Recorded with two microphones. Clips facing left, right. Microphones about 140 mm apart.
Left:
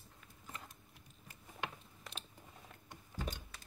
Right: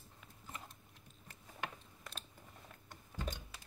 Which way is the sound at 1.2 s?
20° left (ahead or behind).